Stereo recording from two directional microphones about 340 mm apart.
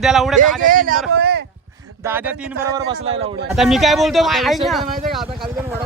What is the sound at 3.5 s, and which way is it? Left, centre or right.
Speech, centre.